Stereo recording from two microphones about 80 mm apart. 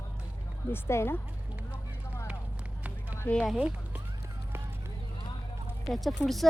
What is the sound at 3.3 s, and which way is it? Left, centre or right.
Speech, centre.